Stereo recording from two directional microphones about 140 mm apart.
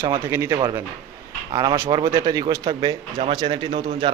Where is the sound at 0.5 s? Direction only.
30° right (ahead or behind).